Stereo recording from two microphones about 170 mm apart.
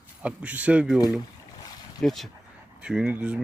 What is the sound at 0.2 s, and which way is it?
Speech, 10° right (ahead or behind).